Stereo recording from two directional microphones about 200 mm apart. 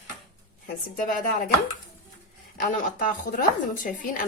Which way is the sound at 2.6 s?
40° left (ahead or behind).